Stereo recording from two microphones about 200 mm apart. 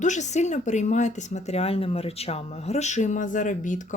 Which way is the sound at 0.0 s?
35° left (ahead or behind).